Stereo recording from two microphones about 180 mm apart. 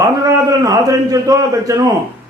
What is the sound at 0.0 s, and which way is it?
A man's voice, 20° right (ahead or behind).